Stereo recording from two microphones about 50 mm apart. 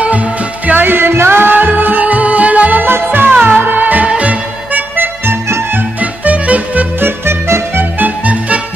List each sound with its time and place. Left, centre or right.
0.7 s music: right
2.9 s music: right
5.9 s music: right
7.0 s music: right
8.0 s music: right